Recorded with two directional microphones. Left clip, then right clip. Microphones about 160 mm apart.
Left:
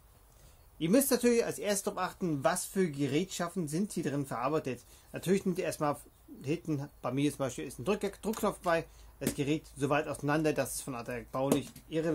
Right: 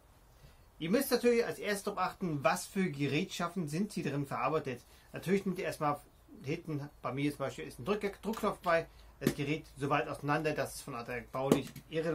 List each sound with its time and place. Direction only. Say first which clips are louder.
0.7 s speech: left 3 dB; 50° left (ahead or behind)